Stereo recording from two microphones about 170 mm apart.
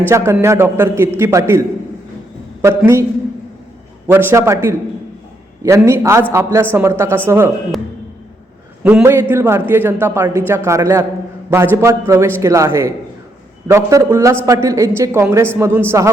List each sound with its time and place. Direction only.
0.1 s a man's voice: 15° right (ahead or behind)
4.0 s a man's voice: 10° right (ahead or behind)
8.8 s a man's voice: 10° right (ahead or behind)